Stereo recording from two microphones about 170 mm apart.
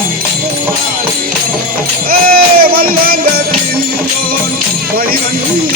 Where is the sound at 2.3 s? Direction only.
60° right (ahead or behind).